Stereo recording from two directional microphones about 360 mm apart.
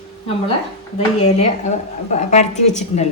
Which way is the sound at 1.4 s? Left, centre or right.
Centre.